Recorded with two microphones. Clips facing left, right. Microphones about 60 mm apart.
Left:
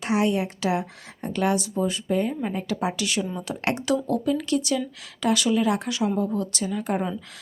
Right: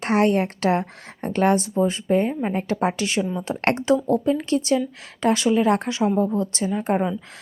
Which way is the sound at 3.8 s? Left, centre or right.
Right.